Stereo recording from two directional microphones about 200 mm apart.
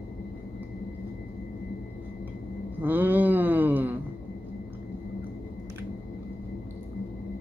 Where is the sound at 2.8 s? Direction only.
10° right (ahead or behind).